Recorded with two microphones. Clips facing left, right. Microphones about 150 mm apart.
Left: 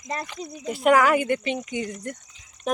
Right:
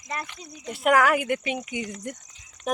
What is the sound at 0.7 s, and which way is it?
Speech, centre (ahead or behind).